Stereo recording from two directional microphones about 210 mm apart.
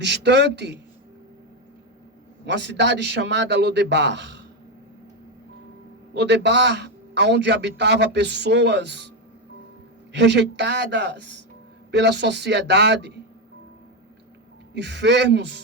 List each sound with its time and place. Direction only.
0.0 s a man's voice: 55° right (ahead or behind)
2.5 s a man's voice: 55° right (ahead or behind)
6.1 s a man's voice: 55° right (ahead or behind)
10.1 s a man's voice: 55° right (ahead or behind)
14.7 s a man's voice: 55° right (ahead or behind)